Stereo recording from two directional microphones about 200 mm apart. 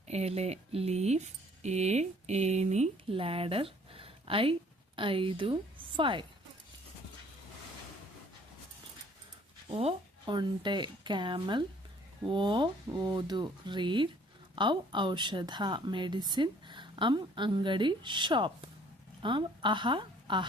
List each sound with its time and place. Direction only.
0.1 s a woman's voice: 30° right (ahead or behind)
9.7 s a woman's voice: 25° right (ahead or behind)